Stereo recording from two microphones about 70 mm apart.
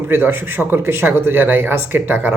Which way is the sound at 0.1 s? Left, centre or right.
Right.